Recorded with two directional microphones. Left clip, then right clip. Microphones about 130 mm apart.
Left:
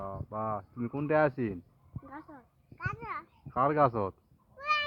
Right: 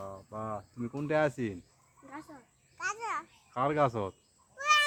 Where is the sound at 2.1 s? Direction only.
65° left (ahead or behind).